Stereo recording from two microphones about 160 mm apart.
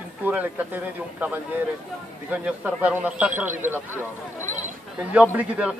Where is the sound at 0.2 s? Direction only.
10° right (ahead or behind).